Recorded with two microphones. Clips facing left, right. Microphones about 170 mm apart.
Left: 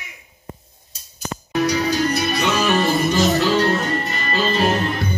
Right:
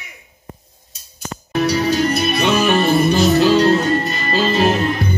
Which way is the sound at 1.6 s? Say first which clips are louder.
Right 3 dB; 25° right (ahead or behind).